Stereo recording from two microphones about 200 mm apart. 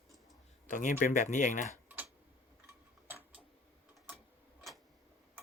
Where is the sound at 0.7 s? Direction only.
40° left (ahead or behind).